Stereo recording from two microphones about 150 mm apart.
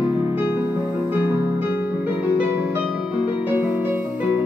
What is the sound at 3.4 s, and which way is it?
Music, 10° right (ahead or behind).